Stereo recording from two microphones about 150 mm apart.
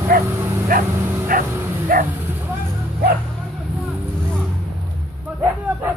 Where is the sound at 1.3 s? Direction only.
70° right (ahead or behind).